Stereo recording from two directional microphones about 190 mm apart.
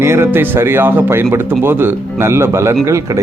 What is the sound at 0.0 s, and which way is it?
Speech, 10° right (ahead or behind).